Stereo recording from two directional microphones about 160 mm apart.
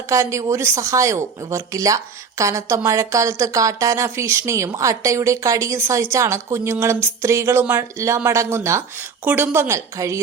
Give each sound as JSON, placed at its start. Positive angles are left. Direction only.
{"t": 0.1, "sound": "speech", "side_deg": -20}